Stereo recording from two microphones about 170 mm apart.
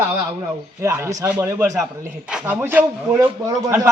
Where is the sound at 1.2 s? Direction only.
10° right (ahead or behind).